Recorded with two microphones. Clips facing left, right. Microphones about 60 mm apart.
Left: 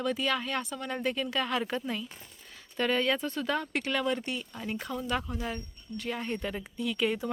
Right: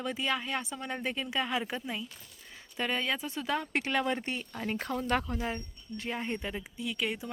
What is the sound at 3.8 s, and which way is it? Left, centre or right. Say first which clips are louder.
Speech: even; right.